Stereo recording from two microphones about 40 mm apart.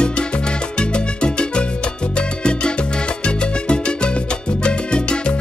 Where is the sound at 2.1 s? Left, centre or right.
Left.